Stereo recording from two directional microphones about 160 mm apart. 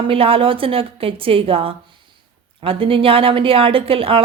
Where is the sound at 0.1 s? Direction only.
35° right (ahead or behind).